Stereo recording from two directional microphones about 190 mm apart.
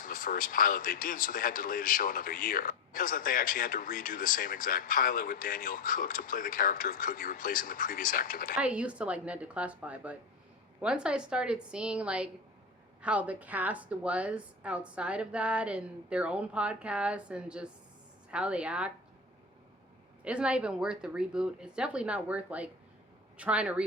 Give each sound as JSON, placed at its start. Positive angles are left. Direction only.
{"t": 0.0, "sound": "speech", "side_deg": 45}
{"t": 8.5, "sound": "a woman's voice", "side_deg": -5}
{"t": 20.2, "sound": "speech", "side_deg": -5}